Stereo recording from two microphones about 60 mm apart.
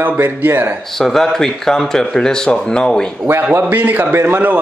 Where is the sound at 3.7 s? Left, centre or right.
Right.